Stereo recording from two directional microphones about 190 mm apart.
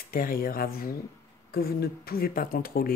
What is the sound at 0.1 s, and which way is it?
Speech, 50° left (ahead or behind).